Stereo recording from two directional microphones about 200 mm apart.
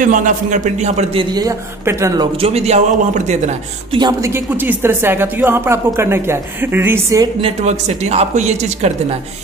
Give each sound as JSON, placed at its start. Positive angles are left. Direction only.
{"t": 0.0, "sound": "a man's voice", "side_deg": -40}
{"t": 1.3, "sound": "speech", "side_deg": -15}
{"t": 2.3, "sound": "a man's voice", "side_deg": -30}
{"t": 4.0, "sound": "speech", "side_deg": -15}
{"t": 7.4, "sound": "a man's voice", "side_deg": -35}